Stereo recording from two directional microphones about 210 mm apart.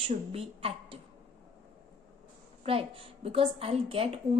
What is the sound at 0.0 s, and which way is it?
Speech, 25° right (ahead or behind).